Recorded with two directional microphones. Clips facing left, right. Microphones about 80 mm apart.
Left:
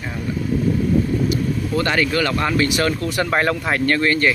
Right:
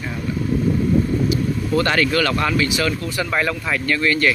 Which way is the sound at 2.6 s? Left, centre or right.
Left.